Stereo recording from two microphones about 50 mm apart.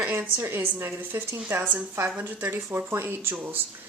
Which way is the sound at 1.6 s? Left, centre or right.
Right.